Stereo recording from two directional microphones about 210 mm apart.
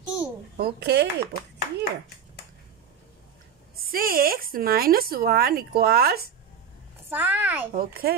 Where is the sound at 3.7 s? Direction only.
45° right (ahead or behind).